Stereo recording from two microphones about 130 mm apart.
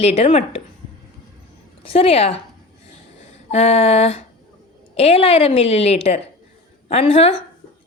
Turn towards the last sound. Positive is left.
turn(degrees=50)  # may be behind; listen again after turning